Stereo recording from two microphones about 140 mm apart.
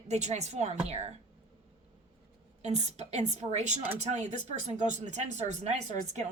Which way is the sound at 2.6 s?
55° right (ahead or behind).